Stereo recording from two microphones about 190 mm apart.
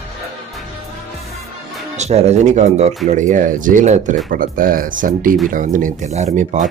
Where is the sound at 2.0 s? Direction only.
35° right (ahead or behind).